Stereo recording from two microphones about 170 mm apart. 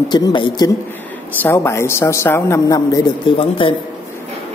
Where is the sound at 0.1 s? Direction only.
25° left (ahead or behind).